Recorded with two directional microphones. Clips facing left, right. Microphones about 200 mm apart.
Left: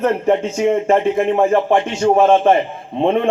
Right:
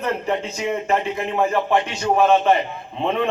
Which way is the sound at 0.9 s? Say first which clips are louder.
Left 7 dB; 25° left (ahead or behind).